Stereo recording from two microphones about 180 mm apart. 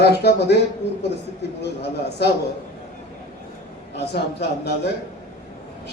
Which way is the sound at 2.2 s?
65° left (ahead or behind).